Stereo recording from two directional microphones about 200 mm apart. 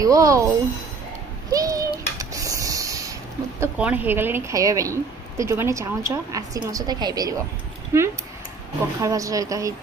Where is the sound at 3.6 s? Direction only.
5° right (ahead or behind).